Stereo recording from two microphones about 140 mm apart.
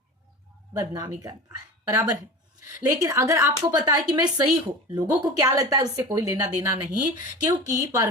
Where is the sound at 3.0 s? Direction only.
20° right (ahead or behind).